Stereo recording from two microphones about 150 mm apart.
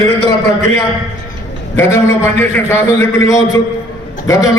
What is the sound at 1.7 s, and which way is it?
A man's voice, 15° left (ahead or behind).